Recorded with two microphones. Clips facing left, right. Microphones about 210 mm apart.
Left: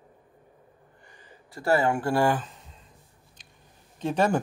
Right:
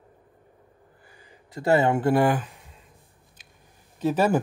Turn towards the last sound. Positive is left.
turn(degrees=-5)  # may be behind; listen again after turning